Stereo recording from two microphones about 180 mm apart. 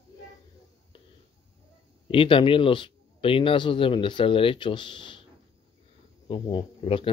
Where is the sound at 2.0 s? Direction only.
30° left (ahead or behind).